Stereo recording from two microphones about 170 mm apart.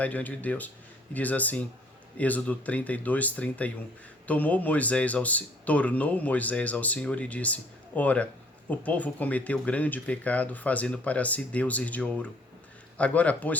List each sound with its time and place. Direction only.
0.0 s speech: 10° left (ahead or behind)